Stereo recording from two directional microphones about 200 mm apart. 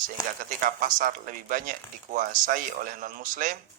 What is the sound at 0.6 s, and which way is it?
Speech, 45° right (ahead or behind).